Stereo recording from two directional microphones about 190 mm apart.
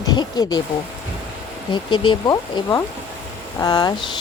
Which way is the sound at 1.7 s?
25° left (ahead or behind).